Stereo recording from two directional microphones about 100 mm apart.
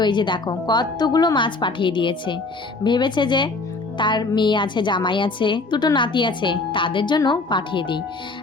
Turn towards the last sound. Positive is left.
turn(degrees=55)  # may be behind; listen again after turning